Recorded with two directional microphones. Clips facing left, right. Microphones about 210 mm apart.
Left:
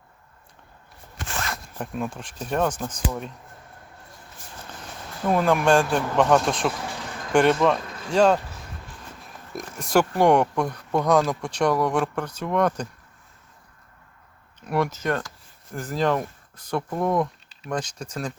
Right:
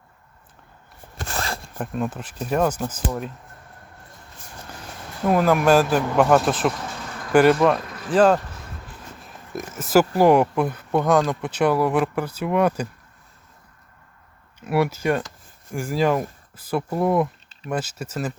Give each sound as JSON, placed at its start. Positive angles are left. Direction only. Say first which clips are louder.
{"t": 1.2, "sound": "zipper", "louder": "right 3 dB", "side_deg": -35}
{"t": 1.8, "sound": "speech", "louder": "right 3 dB", "side_deg": 0}
{"t": 5.2, "sound": "speech", "louder": "right 2 dB", "side_deg": -5}
{"t": 9.2, "sound": "a sound", "louder": "right 3 dB", "side_deg": 0}
{"t": 10.2, "sound": "speech", "louder": "right 3 dB", "side_deg": -5}
{"t": 14.6, "sound": "speech", "louder": "right 3 dB", "side_deg": -5}